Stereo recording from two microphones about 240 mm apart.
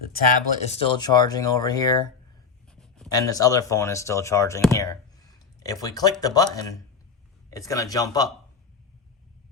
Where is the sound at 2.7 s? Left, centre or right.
Centre.